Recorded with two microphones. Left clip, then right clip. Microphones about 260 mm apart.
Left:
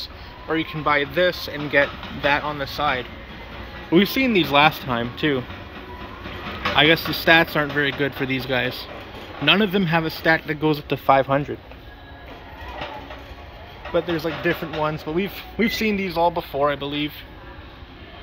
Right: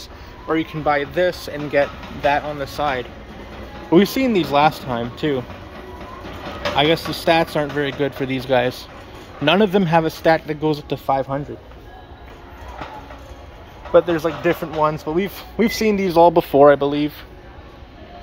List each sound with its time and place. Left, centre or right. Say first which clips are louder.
0.0 s a man's voice: even; centre
6.8 s a man's voice: left 1 dB; centre
13.9 s a man's voice: right 7 dB; centre